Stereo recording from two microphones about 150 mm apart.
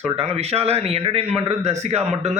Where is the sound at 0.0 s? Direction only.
45° right (ahead or behind).